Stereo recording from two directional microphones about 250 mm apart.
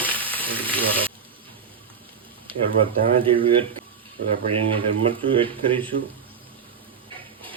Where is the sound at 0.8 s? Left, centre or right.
Right.